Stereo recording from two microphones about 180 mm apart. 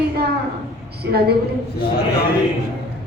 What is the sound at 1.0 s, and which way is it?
Speech, 60° right (ahead or behind).